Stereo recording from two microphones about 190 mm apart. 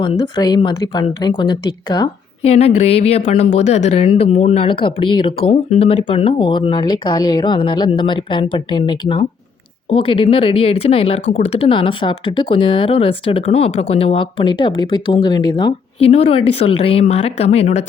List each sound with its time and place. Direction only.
0.0 s speech: 25° left (ahead or behind)
2.4 s speech: 35° left (ahead or behind)